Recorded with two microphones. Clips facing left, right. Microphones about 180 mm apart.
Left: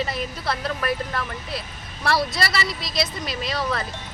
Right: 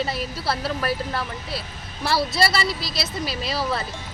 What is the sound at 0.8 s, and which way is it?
Speech, 30° right (ahead or behind).